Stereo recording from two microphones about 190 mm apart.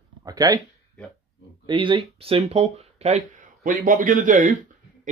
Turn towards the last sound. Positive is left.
turn(degrees=-45)  # may be behind; listen again after turning